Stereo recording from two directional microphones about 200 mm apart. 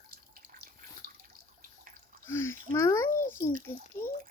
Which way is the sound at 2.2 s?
10° left (ahead or behind).